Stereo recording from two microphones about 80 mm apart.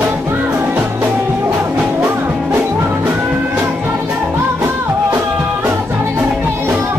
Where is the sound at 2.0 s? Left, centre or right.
Right.